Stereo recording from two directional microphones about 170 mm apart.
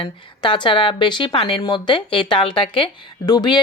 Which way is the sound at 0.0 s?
30° left (ahead or behind).